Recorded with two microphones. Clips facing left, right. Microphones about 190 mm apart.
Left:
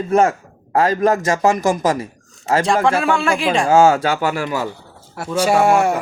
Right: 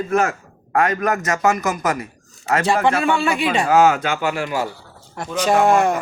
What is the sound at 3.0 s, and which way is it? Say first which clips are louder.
Speech: left 1 dB; centre (ahead or behind).